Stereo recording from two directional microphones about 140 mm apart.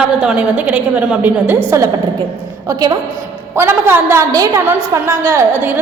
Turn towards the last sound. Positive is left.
turn(degrees=-20)  # may be behind; listen again after turning